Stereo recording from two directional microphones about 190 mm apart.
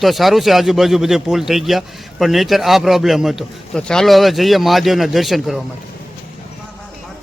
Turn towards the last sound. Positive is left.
turn(degrees=0)  # may be behind; listen again after turning